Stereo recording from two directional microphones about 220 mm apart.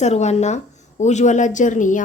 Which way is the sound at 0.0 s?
30° left (ahead or behind).